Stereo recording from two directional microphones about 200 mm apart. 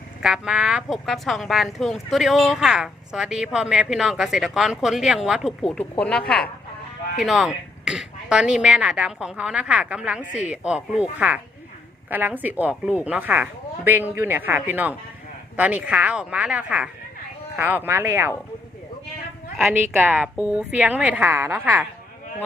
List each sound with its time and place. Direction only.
0.2 s speech: 5° right (ahead or behind)
12.1 s a woman's voice: 10° right (ahead or behind)
19.5 s a woman's voice: 5° right (ahead or behind)